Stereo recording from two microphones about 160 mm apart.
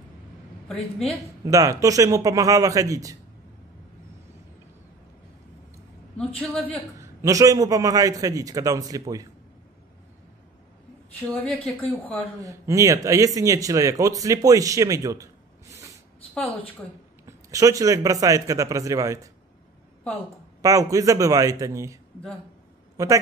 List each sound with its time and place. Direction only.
0.7 s a woman's voice: centre (ahead or behind)
1.4 s speech: 20° right (ahead or behind)
6.1 s a man's voice: 5° left (ahead or behind)
7.0 s speech: 20° right (ahead or behind)
11.3 s a man's voice: 10° left (ahead or behind)
12.4 s speech: 20° right (ahead or behind)
17.3 s speech: 20° right (ahead or behind)
20.6 s speech: 20° right (ahead or behind)
22.9 s a woman's voice: 20° right (ahead or behind)